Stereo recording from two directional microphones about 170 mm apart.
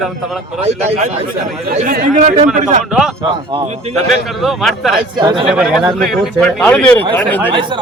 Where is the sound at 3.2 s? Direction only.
30° right (ahead or behind).